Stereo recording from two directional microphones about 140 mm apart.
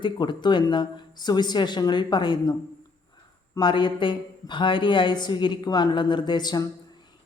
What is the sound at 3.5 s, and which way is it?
A woman's voice, 35° left (ahead or behind).